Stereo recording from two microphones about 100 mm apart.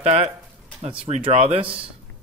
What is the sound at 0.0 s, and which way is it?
Speech, 90° right.